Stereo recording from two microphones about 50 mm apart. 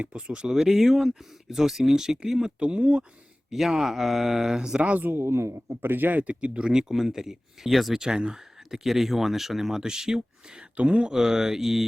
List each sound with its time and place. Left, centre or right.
0.0 s speech: right
0.5 s speech: centre
2.6 s speech: right
3.5 s speech: centre
4.8 s speech: right
5.2 s a woman's voice: right
5.8 s speech: right; by 7.9 s centre
7.9 s speech: centre
10.8 s speech: right
11.1 s speech: centre